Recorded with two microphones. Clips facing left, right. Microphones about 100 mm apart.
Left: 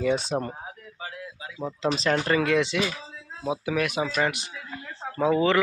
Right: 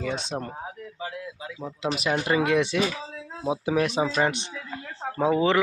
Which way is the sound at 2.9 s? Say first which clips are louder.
Right 4 dB; 90° right.